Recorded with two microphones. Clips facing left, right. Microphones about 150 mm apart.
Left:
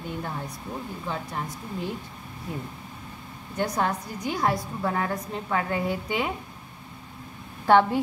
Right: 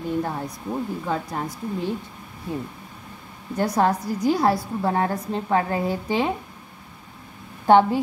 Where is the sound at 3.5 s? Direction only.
35° right (ahead or behind).